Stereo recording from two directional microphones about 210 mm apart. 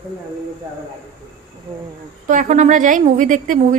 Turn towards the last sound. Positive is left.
turn(degrees=-35)  # may be behind; listen again after turning